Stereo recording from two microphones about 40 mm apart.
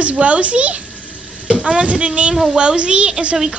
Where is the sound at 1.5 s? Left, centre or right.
Centre.